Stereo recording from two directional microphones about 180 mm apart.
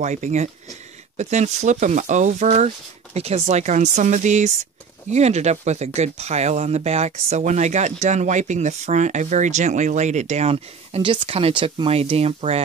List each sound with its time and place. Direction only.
0.0 s speech: 40° right (ahead or behind)